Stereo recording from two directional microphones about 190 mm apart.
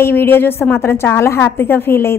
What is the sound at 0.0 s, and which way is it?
A woman's voice, 10° left (ahead or behind).